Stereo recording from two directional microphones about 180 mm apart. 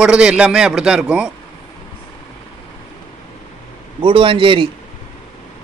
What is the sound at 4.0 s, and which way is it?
Speech, 30° right (ahead or behind).